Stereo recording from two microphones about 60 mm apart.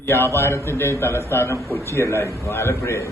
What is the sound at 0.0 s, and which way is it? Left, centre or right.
A man's voice, left.